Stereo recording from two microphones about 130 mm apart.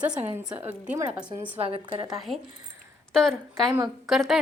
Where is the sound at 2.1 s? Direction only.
Centre (ahead or behind).